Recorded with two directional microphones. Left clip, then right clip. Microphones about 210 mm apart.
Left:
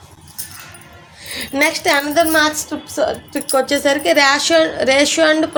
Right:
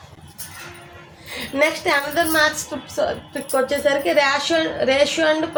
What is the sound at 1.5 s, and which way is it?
A woman's voice, 50° left (ahead or behind).